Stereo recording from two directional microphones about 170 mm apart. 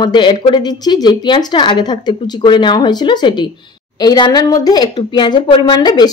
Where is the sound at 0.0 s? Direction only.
25° left (ahead or behind).